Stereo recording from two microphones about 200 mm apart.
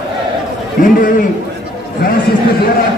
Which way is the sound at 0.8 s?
40° left (ahead or behind).